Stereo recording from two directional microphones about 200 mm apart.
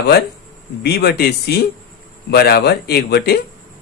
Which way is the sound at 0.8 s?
55° left (ahead or behind).